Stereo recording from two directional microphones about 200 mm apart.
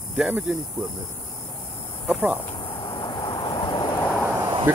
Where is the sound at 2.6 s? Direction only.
25° left (ahead or behind).